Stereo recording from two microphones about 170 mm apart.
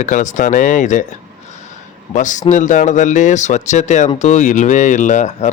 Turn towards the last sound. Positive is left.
turn(degrees=45)  # may be behind; listen again after turning